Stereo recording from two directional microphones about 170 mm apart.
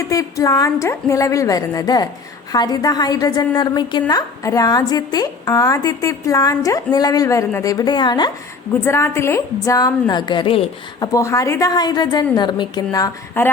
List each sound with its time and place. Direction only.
0.0 s a woman's voice: 20° left (ahead or behind)
8.8 s a woman's voice: 15° left (ahead or behind); by 11.1 s 30° left (ahead or behind)
11.1 s a woman's voice: 20° left (ahead or behind)